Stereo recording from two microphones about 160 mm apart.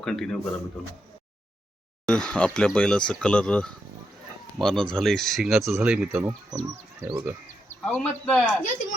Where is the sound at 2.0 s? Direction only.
5° left (ahead or behind).